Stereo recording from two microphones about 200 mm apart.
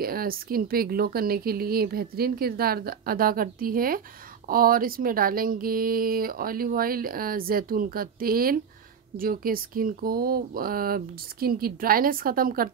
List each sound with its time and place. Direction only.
0.0 s speech: 45° right (ahead or behind)